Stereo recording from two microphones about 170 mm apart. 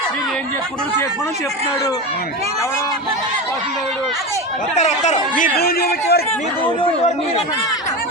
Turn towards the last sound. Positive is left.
turn(degrees=65)  # may be behind; listen again after turning